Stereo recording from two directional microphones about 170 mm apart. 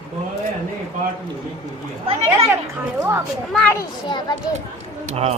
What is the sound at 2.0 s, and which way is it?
Speech, 35° right (ahead or behind).